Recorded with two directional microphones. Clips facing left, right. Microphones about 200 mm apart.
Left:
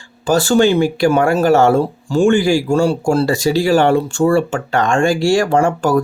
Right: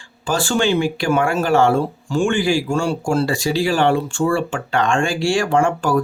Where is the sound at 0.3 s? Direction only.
40° left (ahead or behind).